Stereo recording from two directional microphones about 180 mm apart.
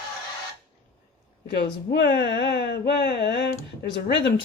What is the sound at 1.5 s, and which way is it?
Speech, 70° left (ahead or behind).